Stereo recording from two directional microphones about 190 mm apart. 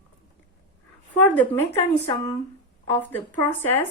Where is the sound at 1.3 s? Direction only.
10° left (ahead or behind).